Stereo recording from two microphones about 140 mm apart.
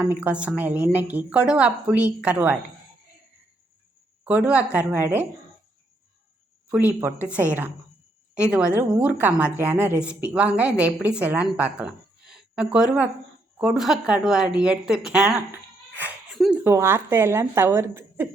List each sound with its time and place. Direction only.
0.2 s a woman's voice: 10° right (ahead or behind)
4.2 s a woman's voice: 10° right (ahead or behind)
6.7 s a woman's voice: 15° right (ahead or behind)